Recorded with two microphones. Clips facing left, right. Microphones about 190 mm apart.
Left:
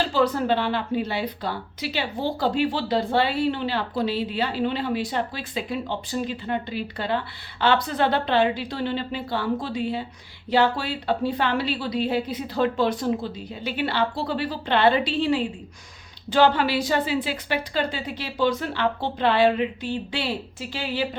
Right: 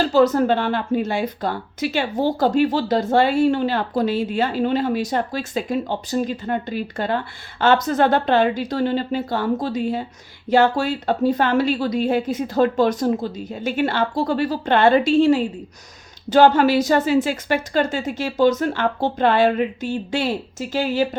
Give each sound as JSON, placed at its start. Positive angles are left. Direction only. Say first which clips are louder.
{"t": 0.0, "sound": "a woman's voice", "louder": "right 6 dB", "side_deg": -45}